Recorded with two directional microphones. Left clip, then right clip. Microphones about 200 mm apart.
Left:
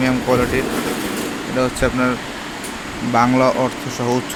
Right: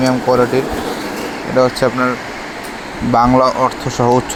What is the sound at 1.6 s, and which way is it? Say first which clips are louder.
Speech: right 4 dB; 20° right (ahead or behind).